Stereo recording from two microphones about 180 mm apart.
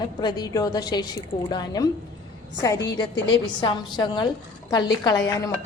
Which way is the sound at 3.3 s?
25° left (ahead or behind).